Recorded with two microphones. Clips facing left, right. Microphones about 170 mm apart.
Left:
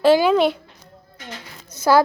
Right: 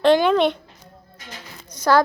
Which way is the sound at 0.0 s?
5° left (ahead or behind).